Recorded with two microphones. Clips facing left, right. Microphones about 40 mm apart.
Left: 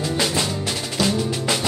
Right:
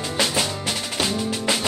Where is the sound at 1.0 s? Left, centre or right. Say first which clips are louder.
Left 1 dB; centre.